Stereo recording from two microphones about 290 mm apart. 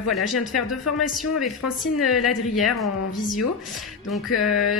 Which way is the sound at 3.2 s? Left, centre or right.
Centre.